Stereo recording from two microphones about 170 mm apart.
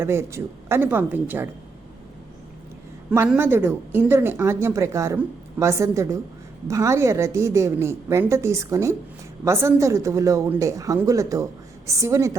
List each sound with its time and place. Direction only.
0.0 s speech: 15° right (ahead or behind)
3.1 s speech: 10° right (ahead or behind)